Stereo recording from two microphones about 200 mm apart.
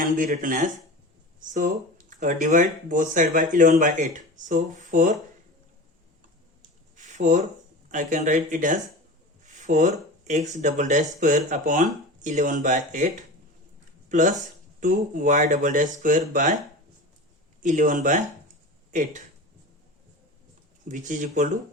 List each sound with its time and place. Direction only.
0.0 s speech: 40° right (ahead or behind)
6.9 s a sound: 40° right (ahead or behind)
7.9 s speech: 40° right (ahead or behind)
17.6 s speech: 40° right (ahead or behind)
20.8 s speech: 40° right (ahead or behind)